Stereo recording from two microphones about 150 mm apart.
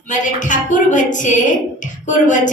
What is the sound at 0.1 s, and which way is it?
A woman's voice, 55° left (ahead or behind).